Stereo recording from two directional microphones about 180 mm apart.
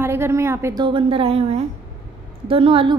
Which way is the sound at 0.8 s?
30° right (ahead or behind).